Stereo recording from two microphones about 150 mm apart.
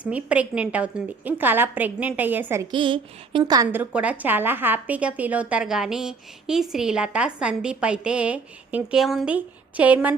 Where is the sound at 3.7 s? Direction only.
10° right (ahead or behind).